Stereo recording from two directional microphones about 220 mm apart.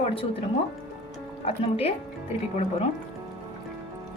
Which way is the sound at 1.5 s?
25° left (ahead or behind).